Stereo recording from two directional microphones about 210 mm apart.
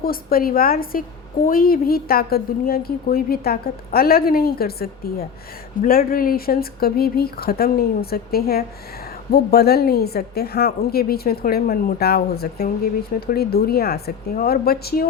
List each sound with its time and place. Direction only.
0.0 s a woman's voice: 45° left (ahead or behind)